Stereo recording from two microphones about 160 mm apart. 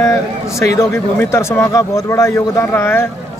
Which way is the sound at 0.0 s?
20° left (ahead or behind).